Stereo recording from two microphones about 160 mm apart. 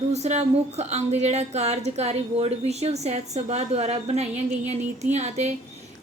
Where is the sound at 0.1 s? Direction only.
45° right (ahead or behind).